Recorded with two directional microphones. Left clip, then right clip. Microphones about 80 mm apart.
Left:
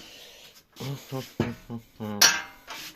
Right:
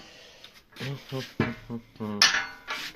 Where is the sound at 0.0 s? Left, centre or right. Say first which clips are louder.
Left 2 dB; left.